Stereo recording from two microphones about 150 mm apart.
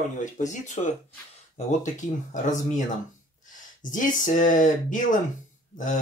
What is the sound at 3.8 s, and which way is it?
Speech, 60° left (ahead or behind).